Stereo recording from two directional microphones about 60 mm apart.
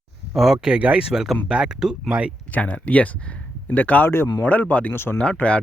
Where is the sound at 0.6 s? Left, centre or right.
Centre.